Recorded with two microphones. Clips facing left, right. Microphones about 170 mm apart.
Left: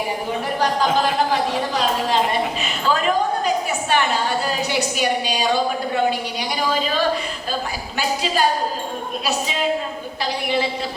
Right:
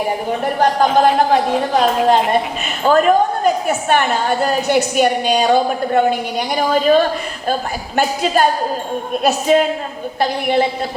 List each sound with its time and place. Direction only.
0.6 s a woman's voice: 50° right (ahead or behind)